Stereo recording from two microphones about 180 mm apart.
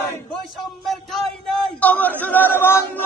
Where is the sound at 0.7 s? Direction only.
Centre (ahead or behind).